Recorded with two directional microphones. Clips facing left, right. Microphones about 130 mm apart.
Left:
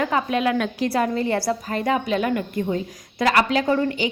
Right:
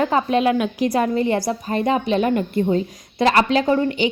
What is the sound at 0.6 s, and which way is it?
A woman's voice, 15° right (ahead or behind).